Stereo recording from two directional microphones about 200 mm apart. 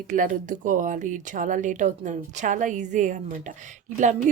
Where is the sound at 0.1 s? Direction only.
40° right (ahead or behind).